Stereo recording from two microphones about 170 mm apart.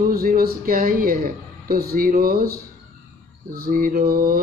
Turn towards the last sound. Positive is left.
turn(degrees=-55)  # may be behind; listen again after turning